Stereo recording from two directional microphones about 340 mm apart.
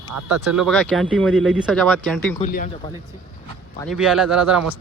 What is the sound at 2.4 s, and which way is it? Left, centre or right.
Speech, left.